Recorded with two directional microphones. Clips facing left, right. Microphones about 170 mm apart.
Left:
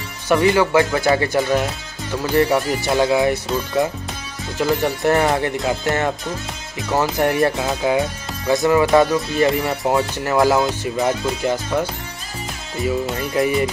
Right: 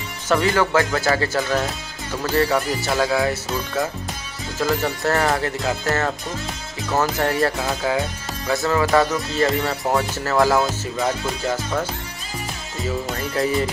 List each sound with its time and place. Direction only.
0.3 s speech: 15° left (ahead or behind)
4.6 s speech: 15° left (ahead or behind)
13.3 s speech: 15° left (ahead or behind)